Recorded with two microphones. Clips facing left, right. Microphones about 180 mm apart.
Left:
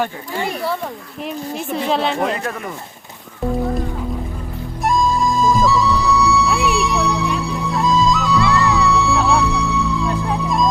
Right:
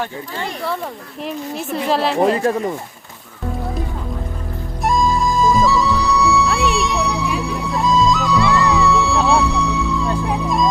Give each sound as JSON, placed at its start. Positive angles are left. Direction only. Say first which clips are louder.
{"t": 0.0, "sound": "a woman's voice", "louder": "left 3 dB", "side_deg": 10}
{"t": 2.3, "sound": "speech", "louder": "right 7 dB", "side_deg": -30}
{"t": 4.8, "sound": "music", "louder": "even", "side_deg": 0}